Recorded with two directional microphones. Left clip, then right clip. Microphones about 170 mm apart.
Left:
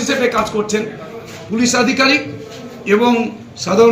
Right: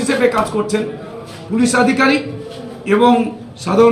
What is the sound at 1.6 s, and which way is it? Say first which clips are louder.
Speech: even; 10° right (ahead or behind).